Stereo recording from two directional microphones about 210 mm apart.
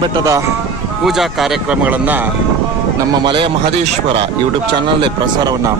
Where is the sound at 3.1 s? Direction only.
20° right (ahead or behind).